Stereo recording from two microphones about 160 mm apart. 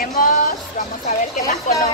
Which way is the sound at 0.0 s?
55° left (ahead or behind).